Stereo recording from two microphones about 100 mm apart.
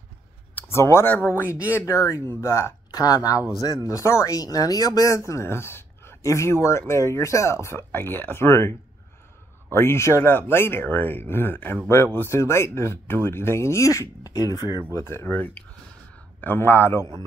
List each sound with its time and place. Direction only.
0.6 s speech: 25° left (ahead or behind)
9.8 s speech: 25° left (ahead or behind)
15.0 s speech: 25° left (ahead or behind)